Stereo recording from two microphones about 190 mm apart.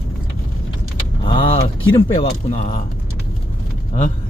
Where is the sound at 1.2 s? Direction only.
30° left (ahead or behind).